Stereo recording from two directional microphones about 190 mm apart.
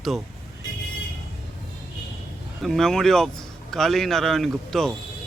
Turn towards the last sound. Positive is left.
turn(degrees=0)  # may be behind; listen again after turning